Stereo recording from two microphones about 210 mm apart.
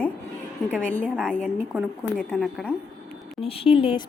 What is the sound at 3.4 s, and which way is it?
Speech, 25° left (ahead or behind).